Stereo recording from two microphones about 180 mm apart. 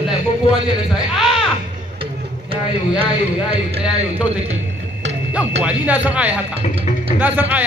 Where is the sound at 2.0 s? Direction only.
30° right (ahead or behind).